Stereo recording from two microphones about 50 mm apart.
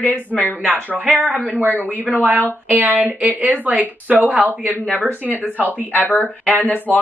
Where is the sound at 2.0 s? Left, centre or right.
Right.